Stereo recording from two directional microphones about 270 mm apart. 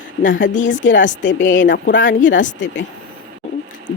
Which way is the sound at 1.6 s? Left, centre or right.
Left.